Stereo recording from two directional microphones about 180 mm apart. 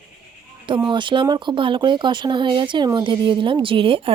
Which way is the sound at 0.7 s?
25° right (ahead or behind).